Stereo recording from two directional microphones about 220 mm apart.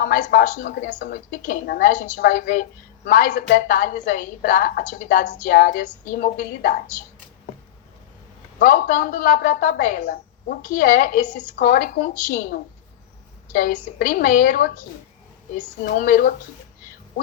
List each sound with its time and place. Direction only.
0.0 s a woman's voice: 40° left (ahead or behind)
8.5 s a woman's voice: 40° left (ahead or behind)